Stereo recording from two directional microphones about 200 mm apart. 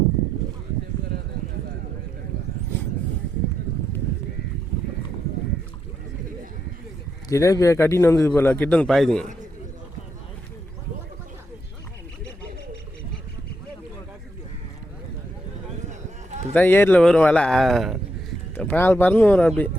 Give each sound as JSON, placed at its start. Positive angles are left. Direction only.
{"t": 7.3, "sound": "a man's voice", "side_deg": 15}
{"t": 15.9, "sound": "a sound", "side_deg": -35}
{"t": 16.6, "sound": "a man's voice", "side_deg": 10}